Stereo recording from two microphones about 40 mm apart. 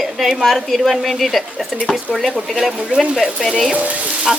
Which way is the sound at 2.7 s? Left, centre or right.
Right.